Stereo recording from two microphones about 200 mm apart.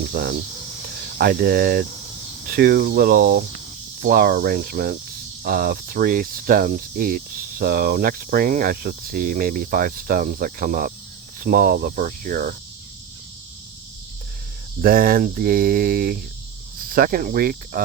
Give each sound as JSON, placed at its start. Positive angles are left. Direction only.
{"t": 0.1, "sound": "speech", "side_deg": -50}
{"t": 14.8, "sound": "speech", "side_deg": -45}